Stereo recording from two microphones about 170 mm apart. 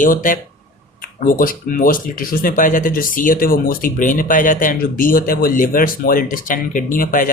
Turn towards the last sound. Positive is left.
turn(degrees=55)  # may be behind; listen again after turning